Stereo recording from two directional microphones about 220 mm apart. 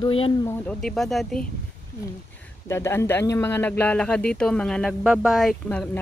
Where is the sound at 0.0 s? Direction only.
25° left (ahead or behind).